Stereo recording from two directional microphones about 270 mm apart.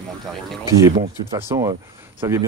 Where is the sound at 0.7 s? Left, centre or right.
Centre.